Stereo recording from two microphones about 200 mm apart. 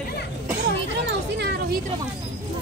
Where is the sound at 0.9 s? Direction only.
60° right (ahead or behind).